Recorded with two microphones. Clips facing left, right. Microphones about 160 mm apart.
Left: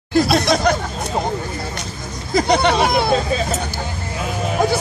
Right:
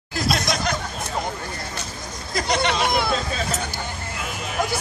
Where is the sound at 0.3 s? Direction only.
65° left (ahead or behind).